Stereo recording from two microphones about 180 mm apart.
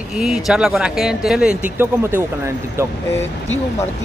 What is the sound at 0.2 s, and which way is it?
Speech, centre (ahead or behind).